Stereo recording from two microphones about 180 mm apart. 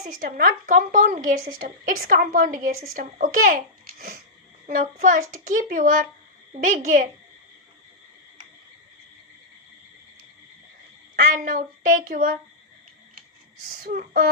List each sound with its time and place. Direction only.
0.0 s a woman's voice: 50° right (ahead or behind)
11.2 s a woman's voice: 50° right (ahead or behind)
13.7 s speech: 55° right (ahead or behind)